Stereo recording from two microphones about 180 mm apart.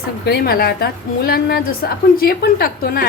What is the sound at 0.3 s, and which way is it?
A woman's voice, 60° left (ahead or behind).